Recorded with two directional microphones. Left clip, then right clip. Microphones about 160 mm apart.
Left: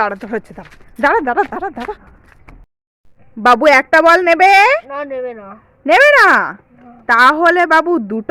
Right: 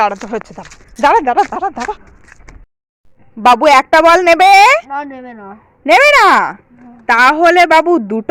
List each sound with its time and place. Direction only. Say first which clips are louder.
0.0 s speech: right 3 dB; 10° left (ahead or behind)
3.4 s a woman's voice: right 2 dB; 5° left (ahead or behind)